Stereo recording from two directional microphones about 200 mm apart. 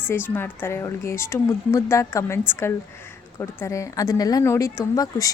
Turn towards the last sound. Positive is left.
turn(degrees=15)  # may be behind; listen again after turning